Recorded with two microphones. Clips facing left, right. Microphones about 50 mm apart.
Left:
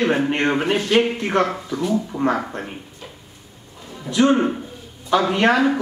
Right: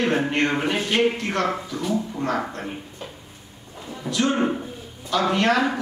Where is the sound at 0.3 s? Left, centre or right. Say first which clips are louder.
Left 3 dB; centre.